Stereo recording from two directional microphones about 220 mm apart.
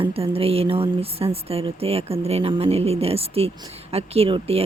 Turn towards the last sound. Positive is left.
turn(degrees=-25)  # may be behind; listen again after turning